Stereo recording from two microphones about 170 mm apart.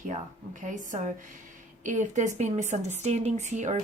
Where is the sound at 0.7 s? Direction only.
50° right (ahead or behind).